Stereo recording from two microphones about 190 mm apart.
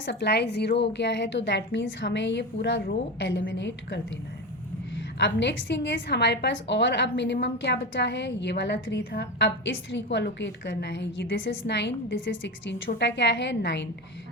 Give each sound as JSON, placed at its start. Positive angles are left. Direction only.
{"t": 0.0, "sound": "a woman's voice", "side_deg": 65}
{"t": 5.2, "sound": "a woman's voice", "side_deg": 65}